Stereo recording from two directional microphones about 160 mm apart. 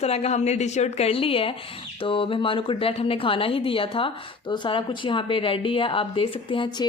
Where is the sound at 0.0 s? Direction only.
40° left (ahead or behind).